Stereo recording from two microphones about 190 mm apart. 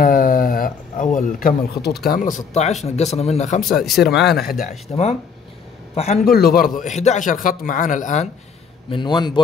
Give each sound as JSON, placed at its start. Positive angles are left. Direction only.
{"t": 0.0, "sound": "a man's voice", "side_deg": 45}
{"t": 3.8, "sound": "speech", "side_deg": 0}
{"t": 4.3, "sound": "a man's voice", "side_deg": 50}
{"t": 6.2, "sound": "a man's voice", "side_deg": 50}
{"t": 8.9, "sound": "a man's voice", "side_deg": 25}